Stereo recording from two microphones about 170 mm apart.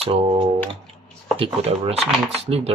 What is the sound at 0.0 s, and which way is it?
Speech, 35° right (ahead or behind).